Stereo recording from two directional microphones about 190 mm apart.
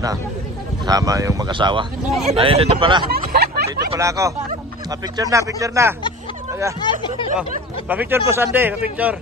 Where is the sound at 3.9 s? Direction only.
15° right (ahead or behind).